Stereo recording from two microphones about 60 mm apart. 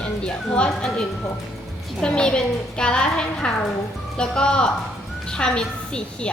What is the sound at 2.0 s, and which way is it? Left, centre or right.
A woman's voice, centre.